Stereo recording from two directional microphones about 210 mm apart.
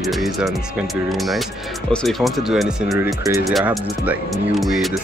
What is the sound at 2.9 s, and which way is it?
Speech, 10° right (ahead or behind).